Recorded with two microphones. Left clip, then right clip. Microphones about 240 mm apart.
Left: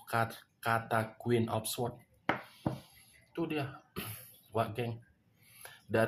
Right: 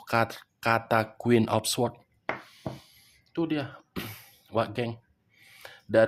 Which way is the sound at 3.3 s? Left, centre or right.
Right.